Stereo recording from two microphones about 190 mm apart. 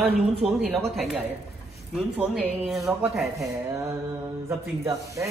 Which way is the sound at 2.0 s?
5° right (ahead or behind).